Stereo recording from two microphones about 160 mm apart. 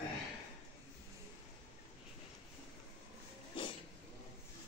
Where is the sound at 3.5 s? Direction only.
30° left (ahead or behind).